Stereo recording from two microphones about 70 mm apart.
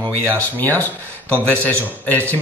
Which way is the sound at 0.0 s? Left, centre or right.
Left.